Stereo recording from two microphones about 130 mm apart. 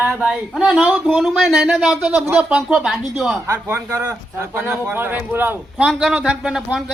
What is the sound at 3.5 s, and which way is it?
Speech, 15° right (ahead or behind).